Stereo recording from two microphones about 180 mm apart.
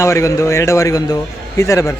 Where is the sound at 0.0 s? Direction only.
15° left (ahead or behind).